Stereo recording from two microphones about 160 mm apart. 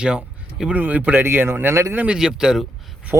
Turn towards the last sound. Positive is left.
turn(degrees=-5)  # may be behind; listen again after turning